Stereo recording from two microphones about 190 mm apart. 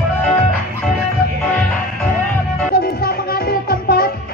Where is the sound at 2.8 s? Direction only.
50° left (ahead or behind).